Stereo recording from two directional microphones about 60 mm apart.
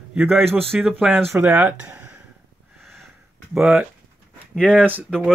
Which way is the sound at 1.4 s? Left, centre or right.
Right.